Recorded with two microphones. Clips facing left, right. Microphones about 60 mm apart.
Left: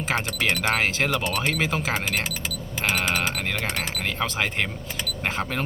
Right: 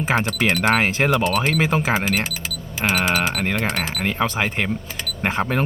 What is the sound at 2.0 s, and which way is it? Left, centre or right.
Speech, centre.